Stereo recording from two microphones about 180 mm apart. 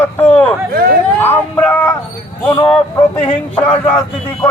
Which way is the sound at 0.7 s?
55° right (ahead or behind).